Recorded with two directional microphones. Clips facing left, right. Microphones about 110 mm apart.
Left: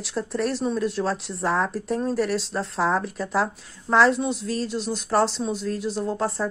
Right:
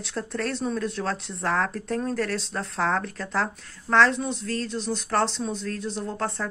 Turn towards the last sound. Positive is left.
turn(degrees=5)  # may be behind; listen again after turning